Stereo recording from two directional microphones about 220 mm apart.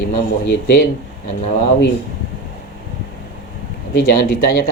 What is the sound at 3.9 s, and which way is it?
Speech, 45° left (ahead or behind).